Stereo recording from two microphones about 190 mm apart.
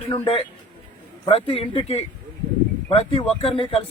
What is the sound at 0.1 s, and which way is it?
A man's voice, 30° left (ahead or behind).